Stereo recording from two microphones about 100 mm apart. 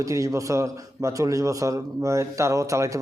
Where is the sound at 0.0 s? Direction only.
30° right (ahead or behind).